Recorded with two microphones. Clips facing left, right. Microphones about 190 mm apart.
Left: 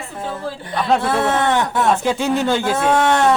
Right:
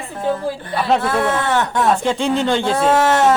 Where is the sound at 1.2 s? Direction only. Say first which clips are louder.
Left 1 dB; 20° left (ahead or behind).